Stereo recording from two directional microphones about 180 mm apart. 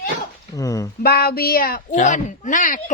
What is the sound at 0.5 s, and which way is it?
Speech, 20° left (ahead or behind).